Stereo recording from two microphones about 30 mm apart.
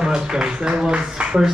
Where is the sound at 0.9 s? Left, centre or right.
Right.